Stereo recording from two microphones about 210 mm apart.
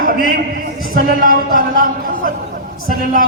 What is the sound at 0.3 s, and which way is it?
A man's voice, 45° right (ahead or behind).